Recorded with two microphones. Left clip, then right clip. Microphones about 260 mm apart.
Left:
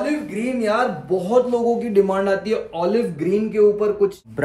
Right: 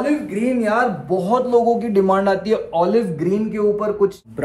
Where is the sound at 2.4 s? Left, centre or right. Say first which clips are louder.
Right 4 dB; centre.